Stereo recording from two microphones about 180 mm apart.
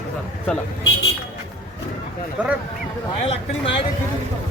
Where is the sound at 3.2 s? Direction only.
30° left (ahead or behind).